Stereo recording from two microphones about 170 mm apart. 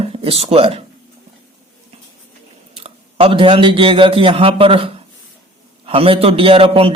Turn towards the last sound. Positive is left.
turn(degrees=-35)  # may be behind; listen again after turning